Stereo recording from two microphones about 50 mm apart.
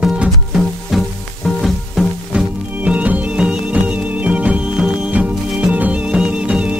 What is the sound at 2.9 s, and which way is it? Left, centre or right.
Music, right.